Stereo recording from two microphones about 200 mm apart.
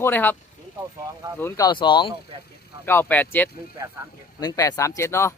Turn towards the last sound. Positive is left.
turn(degrees=15)  # may be behind; listen again after turning